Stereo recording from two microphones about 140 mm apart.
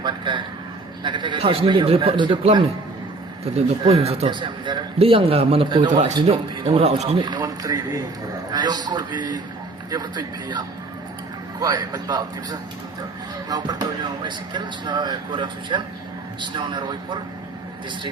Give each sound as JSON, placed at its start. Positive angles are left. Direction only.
{"t": 0.0, "sound": "a man's voice", "side_deg": -35}
{"t": 5.9, "sound": "speech", "side_deg": -55}
{"t": 6.2, "sound": "a man's voice", "side_deg": -45}
{"t": 7.2, "sound": "a man's voice", "side_deg": -30}